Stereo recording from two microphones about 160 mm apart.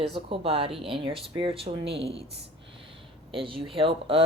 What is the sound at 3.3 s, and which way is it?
Speech, 35° right (ahead or behind).